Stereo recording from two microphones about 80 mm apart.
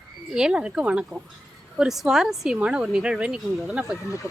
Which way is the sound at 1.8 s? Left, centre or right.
Centre.